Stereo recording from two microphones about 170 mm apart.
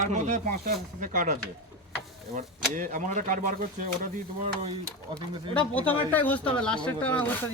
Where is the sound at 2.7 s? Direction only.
50° right (ahead or behind).